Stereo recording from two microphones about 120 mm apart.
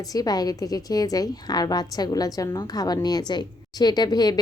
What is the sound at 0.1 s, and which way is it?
A woman's voice, 30° left (ahead or behind).